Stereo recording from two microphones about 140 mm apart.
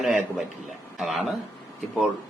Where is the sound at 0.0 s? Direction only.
Centre (ahead or behind).